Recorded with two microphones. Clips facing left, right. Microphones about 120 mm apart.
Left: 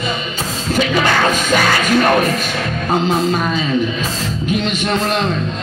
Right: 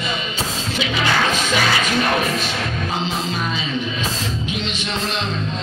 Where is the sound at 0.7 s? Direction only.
45° left (ahead or behind).